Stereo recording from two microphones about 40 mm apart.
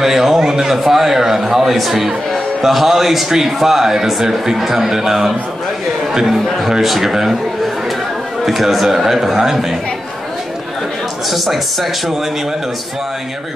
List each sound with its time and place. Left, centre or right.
0.0 s a man's voice: centre
11.2 s speech: centre